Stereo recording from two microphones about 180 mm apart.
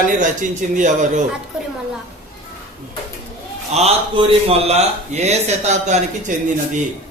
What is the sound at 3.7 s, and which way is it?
A man's voice, 35° right (ahead or behind).